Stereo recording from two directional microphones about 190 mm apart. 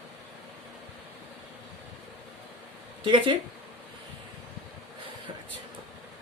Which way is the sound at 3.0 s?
25° right (ahead or behind).